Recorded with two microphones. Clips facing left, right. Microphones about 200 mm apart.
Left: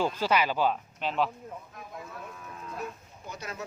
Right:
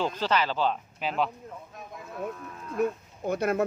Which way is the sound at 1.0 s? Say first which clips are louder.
Even; centre (ahead or behind).